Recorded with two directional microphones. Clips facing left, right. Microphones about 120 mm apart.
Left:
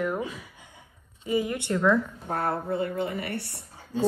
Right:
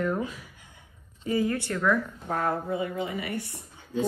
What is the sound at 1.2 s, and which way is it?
Speech, 20° left (ahead or behind).